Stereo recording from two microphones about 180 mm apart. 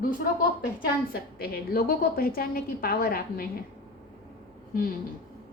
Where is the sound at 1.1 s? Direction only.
55° left (ahead or behind).